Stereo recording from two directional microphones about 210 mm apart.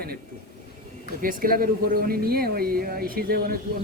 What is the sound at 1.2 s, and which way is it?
Speech, 40° right (ahead or behind).